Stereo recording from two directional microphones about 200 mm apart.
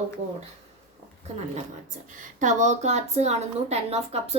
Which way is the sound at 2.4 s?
35° right (ahead or behind).